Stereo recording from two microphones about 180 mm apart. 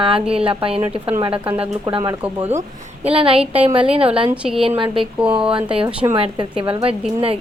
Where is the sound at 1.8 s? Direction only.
20° right (ahead or behind).